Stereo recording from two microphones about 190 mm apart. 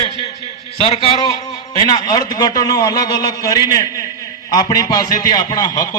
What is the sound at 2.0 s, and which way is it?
A man's voice, 20° left (ahead or behind).